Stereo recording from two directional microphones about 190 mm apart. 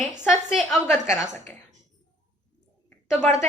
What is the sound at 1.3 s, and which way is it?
Speech, 40° right (ahead or behind).